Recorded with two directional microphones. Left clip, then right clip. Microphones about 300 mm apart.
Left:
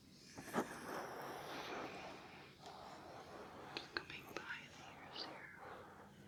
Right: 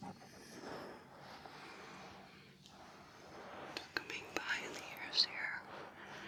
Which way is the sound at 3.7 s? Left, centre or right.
Centre.